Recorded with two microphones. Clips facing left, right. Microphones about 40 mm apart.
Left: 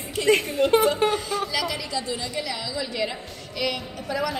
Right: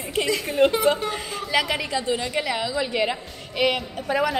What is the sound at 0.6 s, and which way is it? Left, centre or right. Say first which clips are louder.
Speech: right 6 dB; right.